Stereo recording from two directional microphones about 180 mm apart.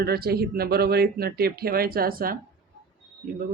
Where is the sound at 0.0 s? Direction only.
60° right (ahead or behind).